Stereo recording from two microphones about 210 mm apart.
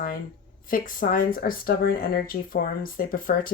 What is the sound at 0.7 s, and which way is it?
Speech, 40° left (ahead or behind).